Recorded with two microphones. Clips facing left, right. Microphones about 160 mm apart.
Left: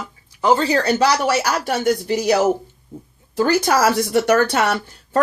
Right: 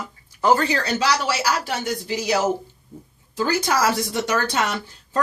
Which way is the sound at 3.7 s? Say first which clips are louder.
Left 4 dB; 60° left (ahead or behind).